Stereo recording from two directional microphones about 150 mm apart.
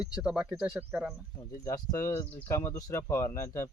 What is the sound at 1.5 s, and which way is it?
Speech, 20° left (ahead or behind).